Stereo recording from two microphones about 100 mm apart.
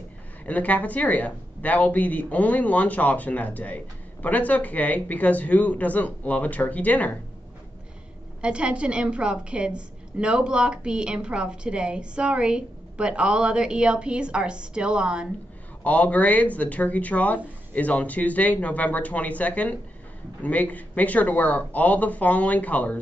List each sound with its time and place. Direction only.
0.5 s speech: 15° left (ahead or behind)
8.4 s a woman's voice: 10° right (ahead or behind)
15.8 s speech: 15° left (ahead or behind)